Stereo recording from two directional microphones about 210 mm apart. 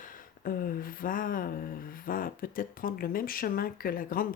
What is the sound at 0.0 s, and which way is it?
Speech, 45° left (ahead or behind).